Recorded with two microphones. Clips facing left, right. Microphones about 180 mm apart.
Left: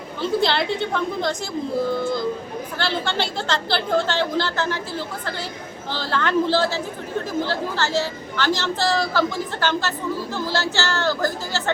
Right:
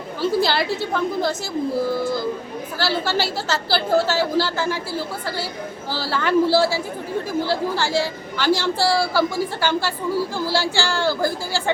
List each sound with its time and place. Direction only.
0.2 s a woman's voice: 5° right (ahead or behind)